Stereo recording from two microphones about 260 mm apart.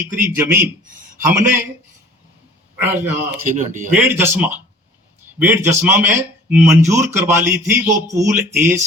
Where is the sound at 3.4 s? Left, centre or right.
Right.